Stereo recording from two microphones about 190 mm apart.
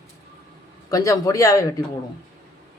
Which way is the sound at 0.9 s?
15° left (ahead or behind).